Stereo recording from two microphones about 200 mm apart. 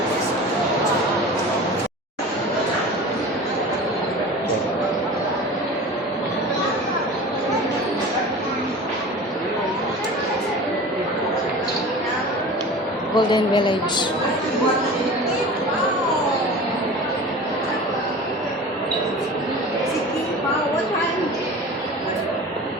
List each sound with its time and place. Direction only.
13.1 s speech: 20° left (ahead or behind)